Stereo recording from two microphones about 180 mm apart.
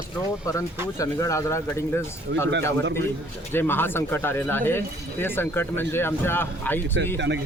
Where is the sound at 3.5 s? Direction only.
10° left (ahead or behind).